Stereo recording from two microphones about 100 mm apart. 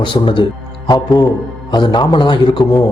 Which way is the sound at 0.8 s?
40° left (ahead or behind).